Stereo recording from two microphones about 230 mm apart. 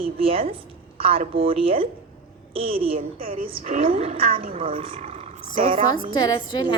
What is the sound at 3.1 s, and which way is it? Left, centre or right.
Speech, right.